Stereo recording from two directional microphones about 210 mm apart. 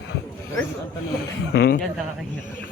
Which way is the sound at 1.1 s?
45° left (ahead or behind).